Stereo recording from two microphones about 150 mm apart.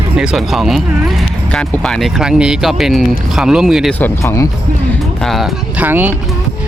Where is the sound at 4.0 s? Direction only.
15° left (ahead or behind).